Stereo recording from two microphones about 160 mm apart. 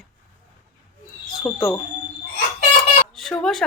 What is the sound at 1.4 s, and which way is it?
Speech, 20° left (ahead or behind).